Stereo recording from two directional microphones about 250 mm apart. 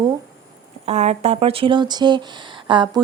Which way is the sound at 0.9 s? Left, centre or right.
Right.